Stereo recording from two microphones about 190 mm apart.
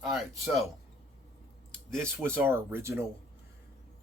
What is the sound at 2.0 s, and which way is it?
Speech, 10° right (ahead or behind).